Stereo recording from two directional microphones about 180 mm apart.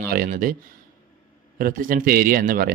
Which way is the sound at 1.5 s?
50° right (ahead or behind).